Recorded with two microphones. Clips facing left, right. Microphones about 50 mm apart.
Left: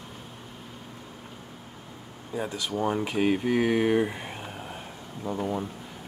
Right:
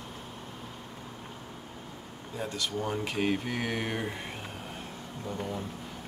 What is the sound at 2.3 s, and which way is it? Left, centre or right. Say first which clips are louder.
Speech: left 3 dB; centre.